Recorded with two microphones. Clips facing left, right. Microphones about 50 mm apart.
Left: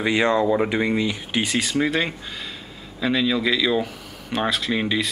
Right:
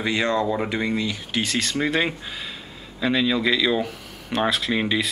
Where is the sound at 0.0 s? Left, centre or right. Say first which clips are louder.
Left 3 dB; centre.